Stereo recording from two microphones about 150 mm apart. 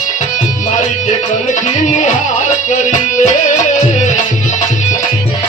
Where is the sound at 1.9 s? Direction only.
55° left (ahead or behind).